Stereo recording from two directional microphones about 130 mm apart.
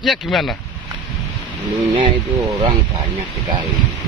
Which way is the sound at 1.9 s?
35° right (ahead or behind).